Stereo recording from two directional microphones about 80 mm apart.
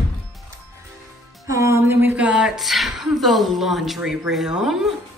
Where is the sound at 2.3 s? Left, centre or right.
Centre.